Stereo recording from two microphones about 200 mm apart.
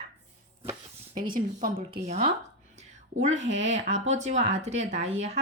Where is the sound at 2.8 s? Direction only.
35° right (ahead or behind).